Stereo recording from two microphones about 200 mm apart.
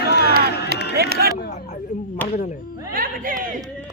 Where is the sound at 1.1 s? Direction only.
50° right (ahead or behind).